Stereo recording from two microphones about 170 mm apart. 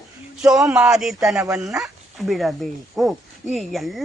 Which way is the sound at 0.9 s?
5° right (ahead or behind).